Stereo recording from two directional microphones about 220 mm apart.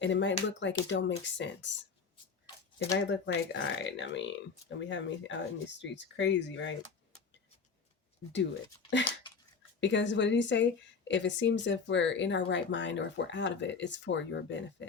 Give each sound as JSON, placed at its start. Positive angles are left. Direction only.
{"t": 0.0, "sound": "speech", "side_deg": 55}
{"t": 3.1, "sound": "speech", "side_deg": 55}
{"t": 9.8, "sound": "speech", "side_deg": 55}